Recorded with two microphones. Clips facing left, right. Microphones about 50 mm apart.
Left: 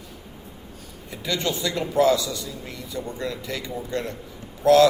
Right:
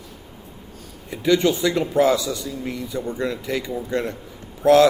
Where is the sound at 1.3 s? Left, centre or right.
Right.